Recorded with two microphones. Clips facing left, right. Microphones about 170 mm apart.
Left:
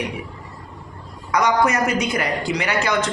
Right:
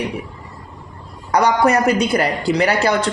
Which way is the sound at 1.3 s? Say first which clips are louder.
Right 4 dB; 35° right (ahead or behind).